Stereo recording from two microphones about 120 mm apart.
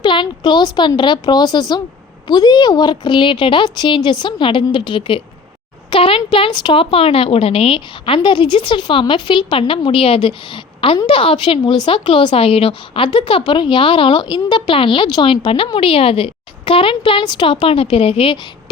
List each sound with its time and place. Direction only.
0.0 s a woman's voice: 40° left (ahead or behind)